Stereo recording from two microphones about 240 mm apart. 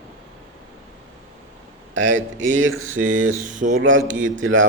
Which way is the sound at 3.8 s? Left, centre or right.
Right.